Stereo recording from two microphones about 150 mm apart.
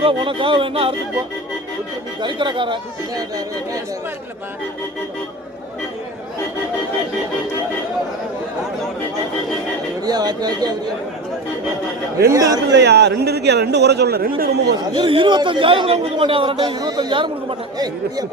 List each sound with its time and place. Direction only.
0.0 s a man's voice: 35° right (ahead or behind)
2.2 s a man's voice: 30° right (ahead or behind)
10.0 s speech: 25° right (ahead or behind)
12.3 s speech: 25° right (ahead or behind)
12.9 s a man's voice: 90° right
14.9 s a man's voice: 35° right (ahead or behind)